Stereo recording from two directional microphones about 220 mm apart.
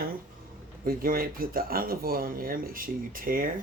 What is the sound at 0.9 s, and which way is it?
Speech, 40° right (ahead or behind).